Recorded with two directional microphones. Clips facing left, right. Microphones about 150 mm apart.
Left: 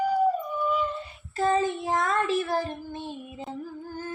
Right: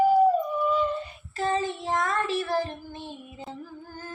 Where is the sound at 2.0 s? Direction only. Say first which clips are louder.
Left 3 dB; 25° left (ahead or behind).